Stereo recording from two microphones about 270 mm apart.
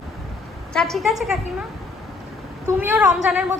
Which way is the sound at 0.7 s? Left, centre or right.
Centre.